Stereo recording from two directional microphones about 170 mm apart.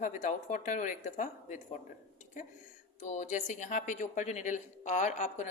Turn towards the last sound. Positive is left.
turn(degrees=45)  # may be behind; listen again after turning